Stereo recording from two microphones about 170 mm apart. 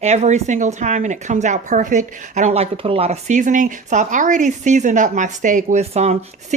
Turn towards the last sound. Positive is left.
turn(degrees=-40)  # may be behind; listen again after turning